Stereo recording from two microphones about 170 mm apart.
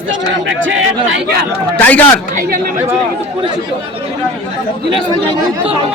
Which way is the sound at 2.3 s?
55° right (ahead or behind).